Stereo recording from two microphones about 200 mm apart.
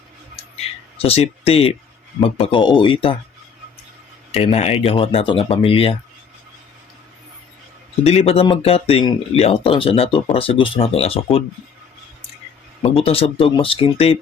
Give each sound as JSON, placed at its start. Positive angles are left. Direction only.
{"t": 1.0, "sound": "speech", "side_deg": 30}
{"t": 4.4, "sound": "speech", "side_deg": 30}
{"t": 8.0, "sound": "speech", "side_deg": 30}
{"t": 13.1, "sound": "speech", "side_deg": 30}